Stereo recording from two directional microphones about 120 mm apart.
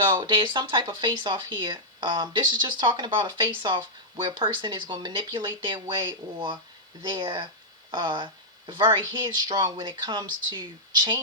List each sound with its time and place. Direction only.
0.1 s speech: 40° right (ahead or behind)